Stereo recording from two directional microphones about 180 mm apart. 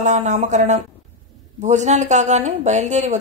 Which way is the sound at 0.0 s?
40° right (ahead or behind).